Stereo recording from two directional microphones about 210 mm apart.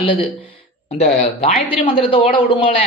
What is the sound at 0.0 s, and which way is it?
Speech, 25° left (ahead or behind).